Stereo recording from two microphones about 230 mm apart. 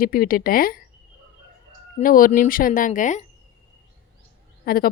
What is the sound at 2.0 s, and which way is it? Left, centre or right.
A woman's voice, left.